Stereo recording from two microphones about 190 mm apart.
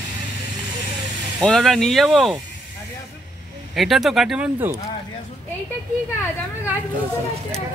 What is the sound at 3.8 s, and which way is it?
Speech, centre (ahead or behind).